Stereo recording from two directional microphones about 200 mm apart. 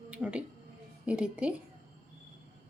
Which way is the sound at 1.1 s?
5° right (ahead or behind).